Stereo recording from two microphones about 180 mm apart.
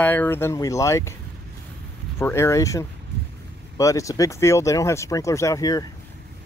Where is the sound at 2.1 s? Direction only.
15° left (ahead or behind).